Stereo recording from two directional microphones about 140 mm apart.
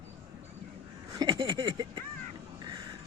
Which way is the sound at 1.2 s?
35° right (ahead or behind).